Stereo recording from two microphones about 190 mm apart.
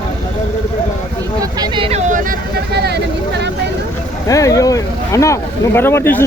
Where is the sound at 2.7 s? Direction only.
60° right (ahead or behind).